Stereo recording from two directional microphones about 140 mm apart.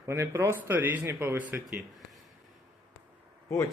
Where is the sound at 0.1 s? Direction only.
20° right (ahead or behind).